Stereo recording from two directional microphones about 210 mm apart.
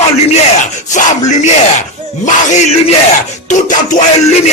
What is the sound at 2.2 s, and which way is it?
Speech, 35° left (ahead or behind).